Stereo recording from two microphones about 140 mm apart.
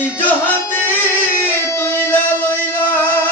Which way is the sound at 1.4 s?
20° left (ahead or behind).